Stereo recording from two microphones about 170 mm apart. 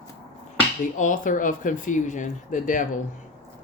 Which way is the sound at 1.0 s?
50° left (ahead or behind).